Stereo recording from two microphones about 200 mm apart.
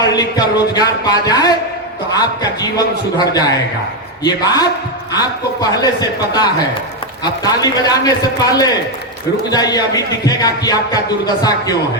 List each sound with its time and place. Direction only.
0.0 s speech: 20° left (ahead or behind)
4.2 s speech: 20° left (ahead or behind)